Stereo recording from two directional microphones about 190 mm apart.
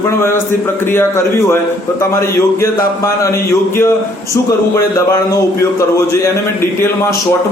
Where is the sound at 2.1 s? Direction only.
15° left (ahead or behind).